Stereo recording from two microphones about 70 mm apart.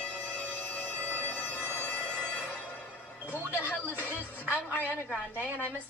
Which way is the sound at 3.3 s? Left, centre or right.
Left.